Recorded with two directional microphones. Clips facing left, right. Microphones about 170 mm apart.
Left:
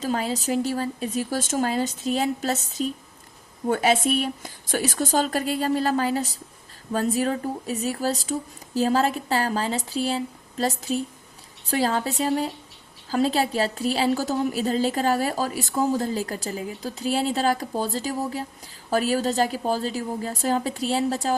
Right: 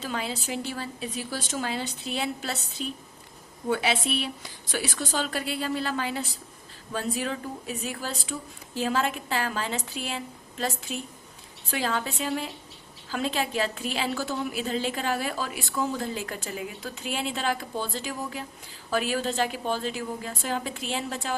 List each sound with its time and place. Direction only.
0.0 s a woman's voice: 40° left (ahead or behind)